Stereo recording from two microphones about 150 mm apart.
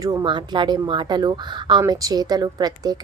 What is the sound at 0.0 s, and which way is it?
A woman's voice, 25° right (ahead or behind).